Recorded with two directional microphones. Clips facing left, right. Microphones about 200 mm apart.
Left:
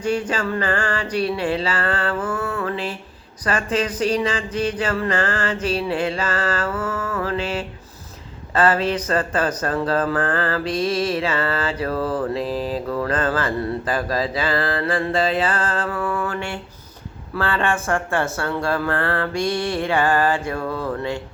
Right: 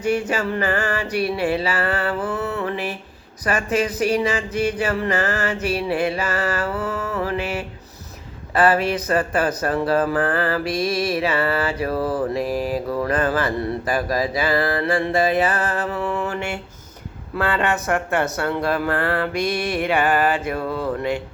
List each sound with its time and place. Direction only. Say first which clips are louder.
0.1 s speech: right 1 dB; 15° right (ahead or behind)
17.3 s speech: right 1 dB; 20° right (ahead or behind)